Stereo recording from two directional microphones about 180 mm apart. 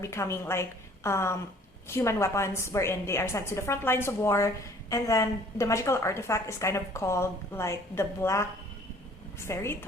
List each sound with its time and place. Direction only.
0.0 s a woman's voice: 15° left (ahead or behind)
9.5 s a woman's voice: 15° left (ahead or behind)